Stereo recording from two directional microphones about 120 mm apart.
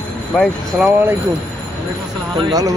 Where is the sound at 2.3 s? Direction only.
30° right (ahead or behind).